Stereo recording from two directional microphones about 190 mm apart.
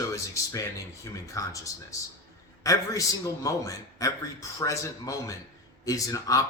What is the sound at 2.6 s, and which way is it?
Speech, 15° left (ahead or behind).